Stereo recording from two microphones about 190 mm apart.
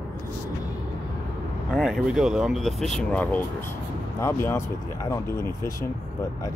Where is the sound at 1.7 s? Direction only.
Centre (ahead or behind).